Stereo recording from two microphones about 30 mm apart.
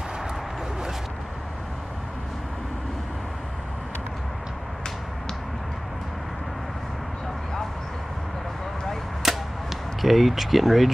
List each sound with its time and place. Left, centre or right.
9.2 s arrow: centre
10.0 s speech: centre